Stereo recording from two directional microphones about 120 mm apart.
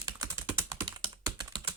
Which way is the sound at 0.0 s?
30° right (ahead or behind).